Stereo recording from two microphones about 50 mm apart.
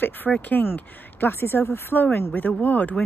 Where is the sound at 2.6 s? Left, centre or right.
Left.